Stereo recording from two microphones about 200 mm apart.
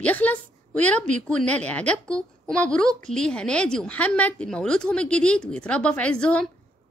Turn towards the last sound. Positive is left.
turn(degrees=5)  # may be behind; listen again after turning